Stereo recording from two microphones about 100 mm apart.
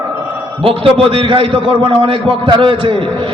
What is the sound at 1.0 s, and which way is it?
A man's voice, 60° right (ahead or behind).